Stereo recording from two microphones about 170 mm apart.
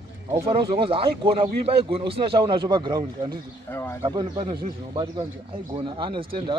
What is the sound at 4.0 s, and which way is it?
A man's voice, 25° right (ahead or behind).